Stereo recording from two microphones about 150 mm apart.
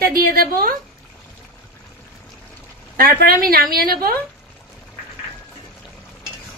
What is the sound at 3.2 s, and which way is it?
Speech, 75° right (ahead or behind).